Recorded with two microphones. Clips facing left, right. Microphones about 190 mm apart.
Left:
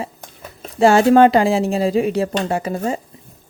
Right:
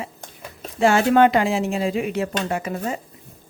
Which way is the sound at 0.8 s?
35° left (ahead or behind).